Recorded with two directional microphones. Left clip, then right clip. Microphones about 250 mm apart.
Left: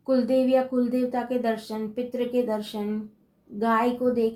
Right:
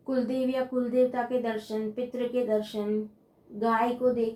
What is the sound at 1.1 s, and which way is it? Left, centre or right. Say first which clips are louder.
Speech: left 3 dB; left.